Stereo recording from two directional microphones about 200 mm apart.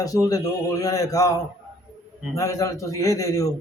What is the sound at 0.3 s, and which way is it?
A man's voice, 15° left (ahead or behind).